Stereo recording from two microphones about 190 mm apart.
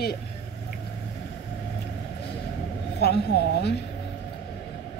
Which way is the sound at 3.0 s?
60° left (ahead or behind).